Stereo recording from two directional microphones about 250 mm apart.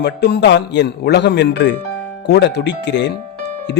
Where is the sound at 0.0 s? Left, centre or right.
Left.